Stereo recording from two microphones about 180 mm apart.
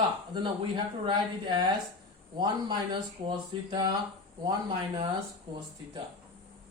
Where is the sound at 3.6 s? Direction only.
25° right (ahead or behind).